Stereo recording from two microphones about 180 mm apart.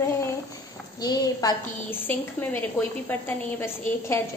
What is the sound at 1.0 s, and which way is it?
A woman's voice, 20° left (ahead or behind).